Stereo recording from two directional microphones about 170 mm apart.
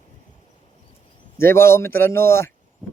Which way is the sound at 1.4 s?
15° left (ahead or behind).